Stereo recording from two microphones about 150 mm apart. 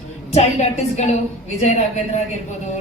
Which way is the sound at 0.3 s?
50° left (ahead or behind).